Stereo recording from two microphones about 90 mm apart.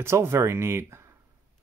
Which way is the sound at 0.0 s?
30° right (ahead or behind).